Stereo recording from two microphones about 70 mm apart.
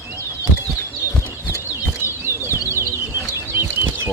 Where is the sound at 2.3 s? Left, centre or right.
Right.